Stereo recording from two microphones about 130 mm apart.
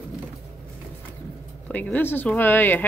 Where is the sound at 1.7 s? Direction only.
10° left (ahead or behind).